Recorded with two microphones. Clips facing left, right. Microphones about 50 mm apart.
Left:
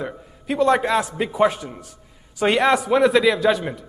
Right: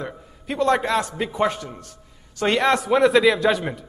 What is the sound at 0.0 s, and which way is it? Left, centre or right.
A man's voice, centre.